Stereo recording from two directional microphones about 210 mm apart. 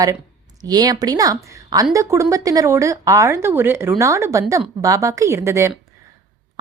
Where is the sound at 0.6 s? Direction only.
20° right (ahead or behind).